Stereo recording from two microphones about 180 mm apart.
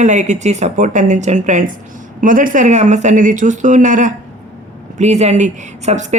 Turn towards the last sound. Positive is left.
turn(degrees=-40)  # may be behind; listen again after turning